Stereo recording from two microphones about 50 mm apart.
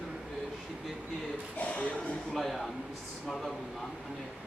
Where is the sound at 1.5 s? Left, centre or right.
Left.